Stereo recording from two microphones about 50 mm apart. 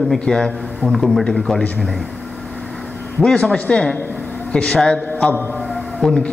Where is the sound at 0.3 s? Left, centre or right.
Centre.